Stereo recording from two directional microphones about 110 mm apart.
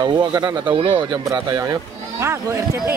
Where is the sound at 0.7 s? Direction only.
50° right (ahead or behind).